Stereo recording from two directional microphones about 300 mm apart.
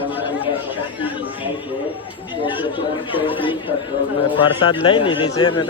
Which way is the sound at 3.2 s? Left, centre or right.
Centre.